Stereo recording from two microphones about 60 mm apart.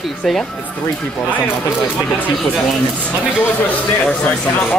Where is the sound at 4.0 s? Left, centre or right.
Centre.